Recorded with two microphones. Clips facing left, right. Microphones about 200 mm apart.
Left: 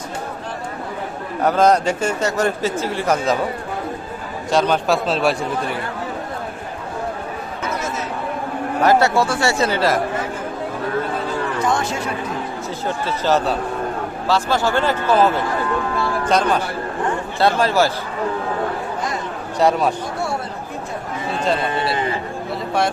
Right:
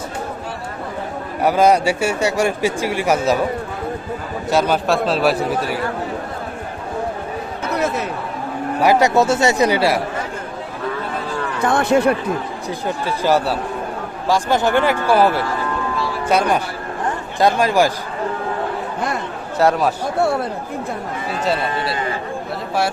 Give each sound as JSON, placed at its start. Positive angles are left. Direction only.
{"t": 1.4, "sound": "a man's voice", "side_deg": -10}
{"t": 4.5, "sound": "a man's voice", "side_deg": -5}
{"t": 8.8, "sound": "a man's voice", "side_deg": -15}
{"t": 11.6, "sound": "speech", "side_deg": -60}
{"t": 13.1, "sound": "a man's voice", "side_deg": -10}
{"t": 19.5, "sound": "a man's voice", "side_deg": 0}